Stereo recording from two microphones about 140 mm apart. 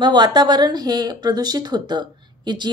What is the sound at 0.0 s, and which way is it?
A woman's voice, 30° right (ahead or behind).